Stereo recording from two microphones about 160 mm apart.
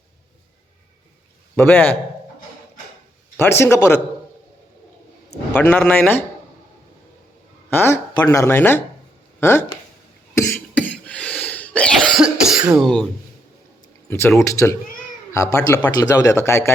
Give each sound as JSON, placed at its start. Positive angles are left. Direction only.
{"t": 1.5, "sound": "speech", "side_deg": 10}
{"t": 3.3, "sound": "speech", "side_deg": 15}
{"t": 5.5, "sound": "speech", "side_deg": 10}
{"t": 7.7, "sound": "speech", "side_deg": 15}
{"t": 10.3, "sound": "cough", "side_deg": 15}
{"t": 10.9, "sound": "cough", "side_deg": 5}
{"t": 12.2, "sound": "cough", "side_deg": -5}
{"t": 12.8, "sound": "speech", "side_deg": 5}
{"t": 14.1, "sound": "a man's voice", "side_deg": 15}